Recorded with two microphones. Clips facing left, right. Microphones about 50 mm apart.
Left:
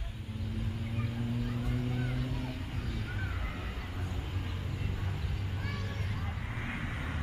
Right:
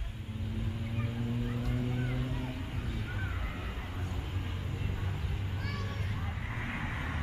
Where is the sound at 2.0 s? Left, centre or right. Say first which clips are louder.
Even; right.